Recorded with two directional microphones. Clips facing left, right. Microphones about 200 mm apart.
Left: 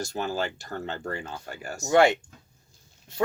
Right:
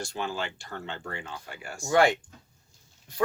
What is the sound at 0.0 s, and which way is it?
Speech, 40° left (ahead or behind).